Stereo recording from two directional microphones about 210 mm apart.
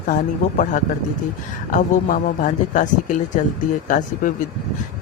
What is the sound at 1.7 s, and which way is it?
Speech, 40° left (ahead or behind).